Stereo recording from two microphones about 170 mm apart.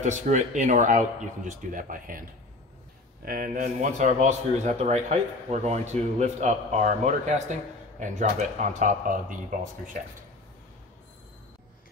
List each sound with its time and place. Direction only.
0.0 s speech: 45° right (ahead or behind)